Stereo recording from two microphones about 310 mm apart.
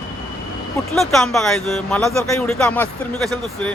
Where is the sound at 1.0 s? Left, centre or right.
Centre.